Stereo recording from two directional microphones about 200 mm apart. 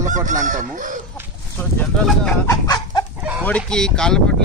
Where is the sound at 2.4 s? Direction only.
15° left (ahead or behind).